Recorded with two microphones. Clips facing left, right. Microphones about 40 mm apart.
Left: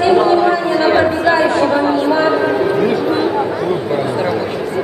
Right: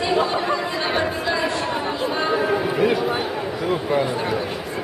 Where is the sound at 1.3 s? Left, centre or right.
Left.